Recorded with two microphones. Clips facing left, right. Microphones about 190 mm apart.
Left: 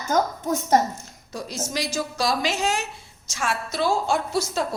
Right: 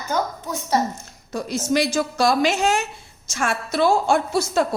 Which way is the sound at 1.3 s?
55° right (ahead or behind).